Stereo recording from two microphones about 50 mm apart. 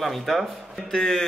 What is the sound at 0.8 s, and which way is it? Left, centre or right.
Speech, centre.